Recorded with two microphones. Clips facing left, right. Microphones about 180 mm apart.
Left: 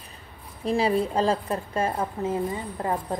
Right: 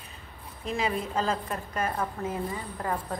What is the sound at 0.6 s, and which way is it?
A woman's voice, 35° left (ahead or behind).